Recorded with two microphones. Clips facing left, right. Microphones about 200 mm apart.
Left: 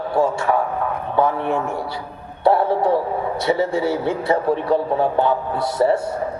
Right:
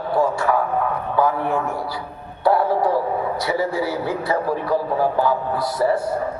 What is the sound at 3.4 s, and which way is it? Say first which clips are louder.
A man's voice: left 6 dB; 25° left (ahead or behind).